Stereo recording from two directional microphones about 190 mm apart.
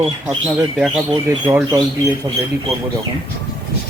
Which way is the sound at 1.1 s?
15° right (ahead or behind).